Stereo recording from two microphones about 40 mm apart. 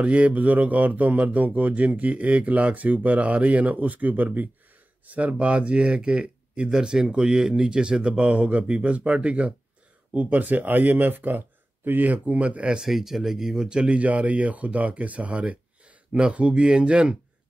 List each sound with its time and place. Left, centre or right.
0.0 s speech: right
8.1 s speech: right
12.9 s speech: centre
13.7 s speech: right
13.9 s speech: right